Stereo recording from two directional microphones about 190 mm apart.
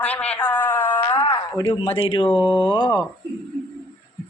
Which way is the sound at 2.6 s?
25° left (ahead or behind).